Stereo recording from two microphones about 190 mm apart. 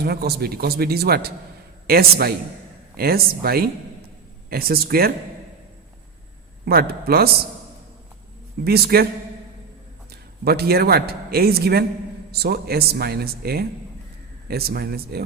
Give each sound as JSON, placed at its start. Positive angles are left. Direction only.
{"t": 0.0, "sound": "speech", "side_deg": -55}
{"t": 6.7, "sound": "speech", "side_deg": -55}
{"t": 8.6, "sound": "speech", "side_deg": -55}
{"t": 10.1, "sound": "a man's voice", "side_deg": -55}